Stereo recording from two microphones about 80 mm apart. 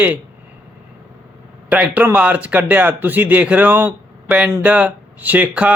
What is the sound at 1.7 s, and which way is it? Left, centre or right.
Speech, centre.